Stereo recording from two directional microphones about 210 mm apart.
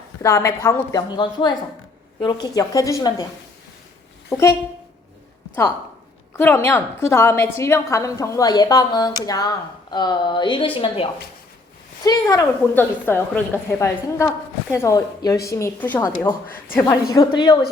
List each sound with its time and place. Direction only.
0.2 s a woman's voice: 15° left (ahead or behind)
6.3 s a woman's voice: 10° left (ahead or behind)